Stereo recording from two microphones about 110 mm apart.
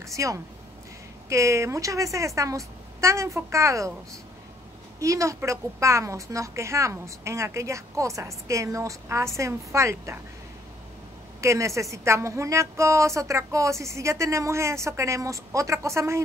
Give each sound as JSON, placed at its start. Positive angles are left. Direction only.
{"t": 0.0, "sound": "a woman's voice", "side_deg": -30}
{"t": 5.0, "sound": "a woman's voice", "side_deg": -30}
{"t": 11.4, "sound": "a woman's voice", "side_deg": -25}